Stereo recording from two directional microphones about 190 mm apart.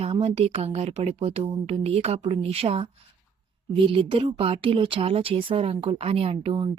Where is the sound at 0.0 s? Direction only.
30° right (ahead or behind).